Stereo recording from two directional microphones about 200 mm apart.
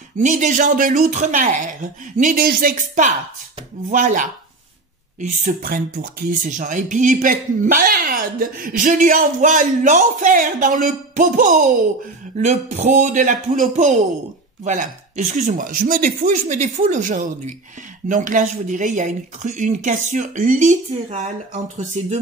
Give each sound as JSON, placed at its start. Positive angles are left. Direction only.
{"t": 0.2, "sound": "speech", "side_deg": -40}